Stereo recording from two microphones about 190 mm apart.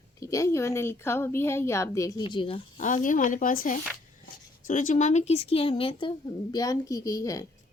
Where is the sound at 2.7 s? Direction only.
45° left (ahead or behind).